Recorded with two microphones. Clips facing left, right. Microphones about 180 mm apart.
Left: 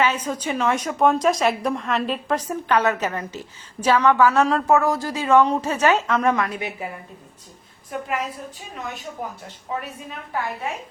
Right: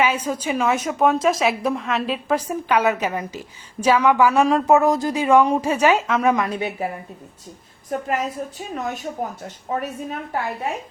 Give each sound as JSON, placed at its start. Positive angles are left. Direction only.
{"t": 0.0, "sound": "a woman's voice", "side_deg": -10}
{"t": 6.5, "sound": "a woman's voice", "side_deg": -30}
{"t": 7.9, "sound": "a woman's voice", "side_deg": -40}